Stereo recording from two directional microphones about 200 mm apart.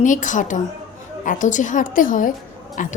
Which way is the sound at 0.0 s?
40° left (ahead or behind).